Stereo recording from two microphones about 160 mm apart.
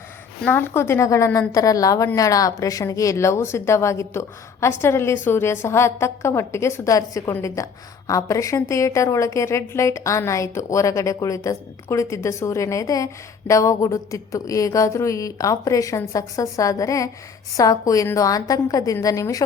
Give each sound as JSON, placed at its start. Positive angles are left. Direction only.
{"t": 0.4, "sound": "a woman's voice", "side_deg": 15}